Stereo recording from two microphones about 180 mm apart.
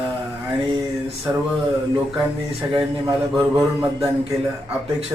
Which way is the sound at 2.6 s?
15° right (ahead or behind).